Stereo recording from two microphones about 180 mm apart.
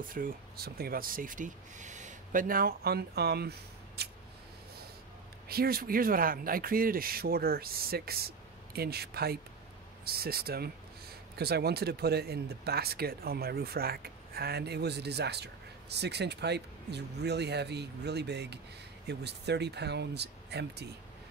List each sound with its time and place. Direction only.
0.1 s speech: 50° right (ahead or behind)
5.5 s speech: 55° right (ahead or behind)